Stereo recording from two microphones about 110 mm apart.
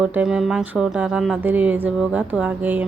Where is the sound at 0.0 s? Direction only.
10° right (ahead or behind).